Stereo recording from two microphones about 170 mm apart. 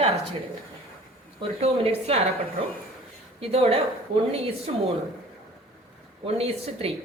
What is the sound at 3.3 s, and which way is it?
Speech, 35° right (ahead or behind).